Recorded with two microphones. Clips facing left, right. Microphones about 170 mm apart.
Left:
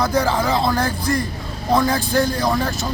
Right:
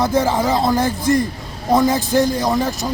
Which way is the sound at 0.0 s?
25° right (ahead or behind).